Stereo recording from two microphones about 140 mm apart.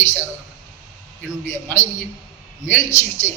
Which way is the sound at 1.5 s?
20° left (ahead or behind).